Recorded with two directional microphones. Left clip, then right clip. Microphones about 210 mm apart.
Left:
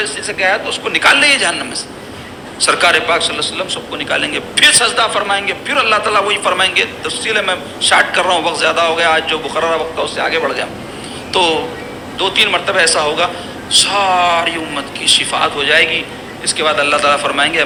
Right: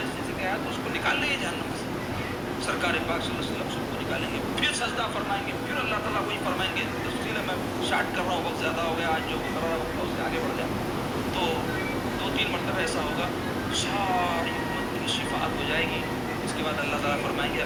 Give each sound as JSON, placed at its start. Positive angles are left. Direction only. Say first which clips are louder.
{"t": 0.4, "sound": "a man's voice", "louder": "left 16 dB", "side_deg": 45}
{"t": 2.6, "sound": "a man's voice", "louder": "left 17 dB", "side_deg": 45}
{"t": 12.2, "sound": "a man's voice", "louder": "left 18 dB", "side_deg": 45}